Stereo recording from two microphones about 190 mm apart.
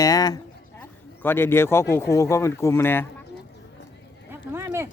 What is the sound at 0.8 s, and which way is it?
Speech, 10° left (ahead or behind).